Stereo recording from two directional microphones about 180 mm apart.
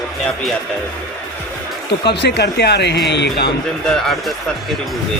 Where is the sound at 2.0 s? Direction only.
70° left (ahead or behind).